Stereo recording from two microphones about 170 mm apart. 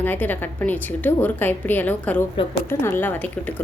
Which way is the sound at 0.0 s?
10° left (ahead or behind).